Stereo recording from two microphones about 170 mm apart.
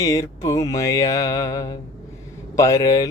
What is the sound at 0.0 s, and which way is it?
Mantra, 20° left (ahead or behind).